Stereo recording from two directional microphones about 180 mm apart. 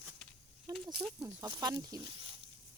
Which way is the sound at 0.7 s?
20° right (ahead or behind).